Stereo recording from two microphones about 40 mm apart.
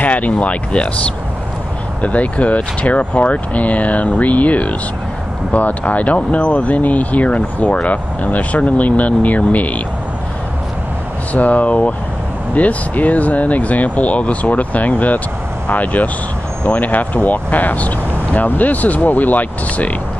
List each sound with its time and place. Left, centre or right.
0.0 s speech: left
2.0 s speech: left
11.3 s speech: left